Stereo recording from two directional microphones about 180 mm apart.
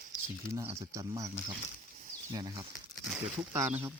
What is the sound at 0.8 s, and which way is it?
Speech, 15° right (ahead or behind).